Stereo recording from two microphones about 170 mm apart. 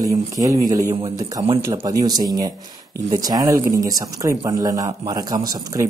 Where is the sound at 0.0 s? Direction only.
20° right (ahead or behind).